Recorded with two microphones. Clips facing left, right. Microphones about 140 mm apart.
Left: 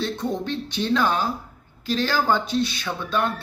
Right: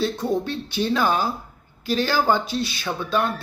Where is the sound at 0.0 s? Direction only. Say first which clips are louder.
Right 3 dB; 5° right (ahead or behind).